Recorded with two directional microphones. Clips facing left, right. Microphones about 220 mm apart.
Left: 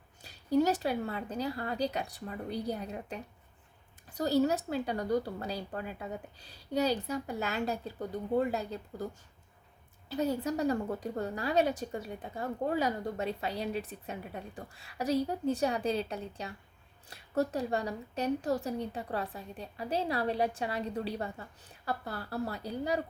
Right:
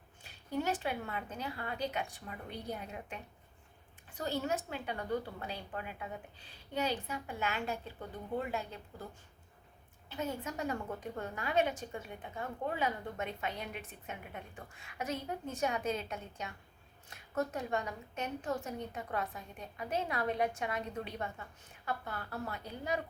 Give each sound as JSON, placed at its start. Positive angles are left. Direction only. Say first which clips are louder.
{"t": 0.2, "sound": "a woman's voice", "louder": "left 10 dB", "side_deg": 40}
{"t": 10.1, "sound": "a woman's voice", "louder": "left 8 dB", "side_deg": 35}